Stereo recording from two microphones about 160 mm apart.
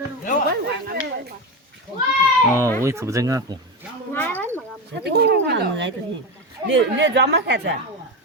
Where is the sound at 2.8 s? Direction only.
15° right (ahead or behind).